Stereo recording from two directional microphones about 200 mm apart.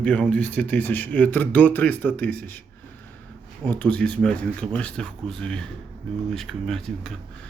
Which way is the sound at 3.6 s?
5° left (ahead or behind).